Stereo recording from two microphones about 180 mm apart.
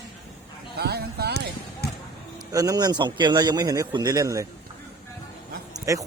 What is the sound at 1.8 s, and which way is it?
Basketball bounce, 60° left (ahead or behind).